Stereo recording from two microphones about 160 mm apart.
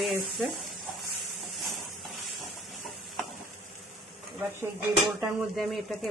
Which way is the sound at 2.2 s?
Centre (ahead or behind).